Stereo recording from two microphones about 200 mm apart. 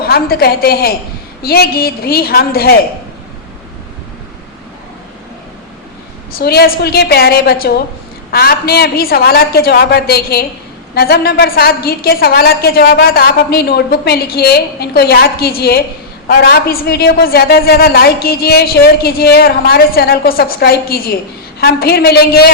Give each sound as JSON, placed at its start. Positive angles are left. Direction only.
{"t": 0.0, "sound": "a woman's voice", "side_deg": 50}
{"t": 6.4, "sound": "a woman's voice", "side_deg": 50}